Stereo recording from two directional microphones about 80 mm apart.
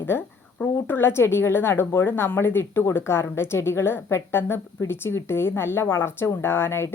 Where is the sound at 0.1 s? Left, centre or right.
Left.